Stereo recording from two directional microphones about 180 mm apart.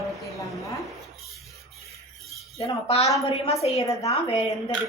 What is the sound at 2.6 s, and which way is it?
Speech, 35° left (ahead or behind).